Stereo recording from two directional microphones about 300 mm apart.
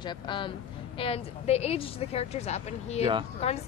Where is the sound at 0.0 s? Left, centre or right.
Centre.